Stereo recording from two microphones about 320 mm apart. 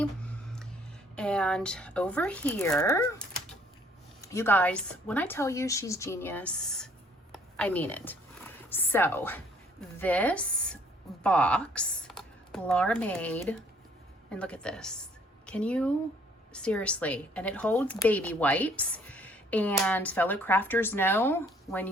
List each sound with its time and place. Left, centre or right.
1.1 s a woman's voice: centre